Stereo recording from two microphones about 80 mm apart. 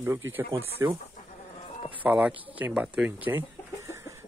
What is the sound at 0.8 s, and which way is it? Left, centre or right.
Speech, right.